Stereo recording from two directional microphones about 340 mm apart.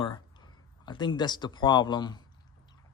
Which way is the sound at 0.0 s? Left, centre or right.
Centre.